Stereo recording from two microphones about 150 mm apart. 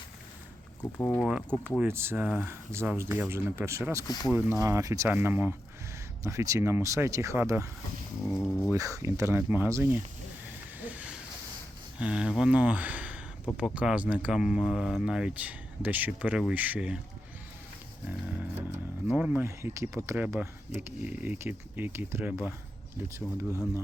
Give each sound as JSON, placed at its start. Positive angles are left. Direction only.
{"t": 0.8, "sound": "speech", "side_deg": 10}
{"t": 1.2, "sound": "speech", "side_deg": -5}
{"t": 1.8, "sound": "speech", "side_deg": -15}
{"t": 4.0, "sound": "speech", "side_deg": 25}
{"t": 4.3, "sound": "speech", "side_deg": -15}
{"t": 8.3, "sound": "speech", "side_deg": 0}
{"t": 8.7, "sound": "speech", "side_deg": -20}
{"t": 10.8, "sound": "a sound", "side_deg": -10}
{"t": 11.9, "sound": "speech", "side_deg": -5}
{"t": 18.0, "sound": "roaring cats", "side_deg": -10}
{"t": 19.0, "sound": "speech", "side_deg": -10}
{"t": 23.5, "sound": "speech", "side_deg": 20}